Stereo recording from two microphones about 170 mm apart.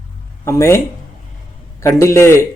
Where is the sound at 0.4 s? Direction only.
15° left (ahead or behind).